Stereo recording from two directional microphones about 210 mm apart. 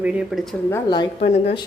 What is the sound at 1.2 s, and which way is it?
Speech, 30° left (ahead or behind).